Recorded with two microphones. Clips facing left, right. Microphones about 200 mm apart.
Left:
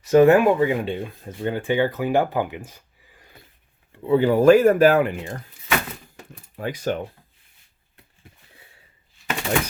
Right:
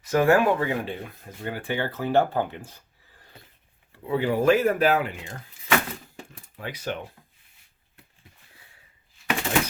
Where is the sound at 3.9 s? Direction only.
30° left (ahead or behind); by 5.4 s 50° left (ahead or behind).